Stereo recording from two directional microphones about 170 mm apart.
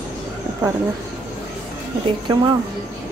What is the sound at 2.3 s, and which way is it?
Speech, 25° right (ahead or behind).